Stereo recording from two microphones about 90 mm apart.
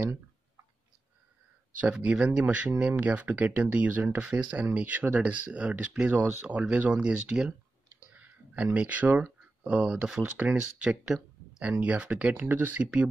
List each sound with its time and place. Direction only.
1.8 s speech: 15° right (ahead or behind)